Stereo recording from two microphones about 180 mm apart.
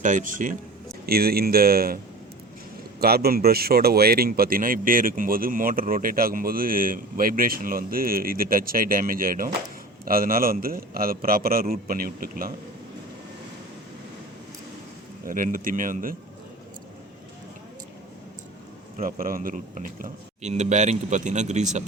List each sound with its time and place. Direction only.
0.0 s speech: 45° right (ahead or behind)
1.0 s speech: 60° right (ahead or behind)
3.0 s speech: 60° right (ahead or behind)
15.3 s speech: 50° right (ahead or behind)
18.9 s speech: 50° right (ahead or behind)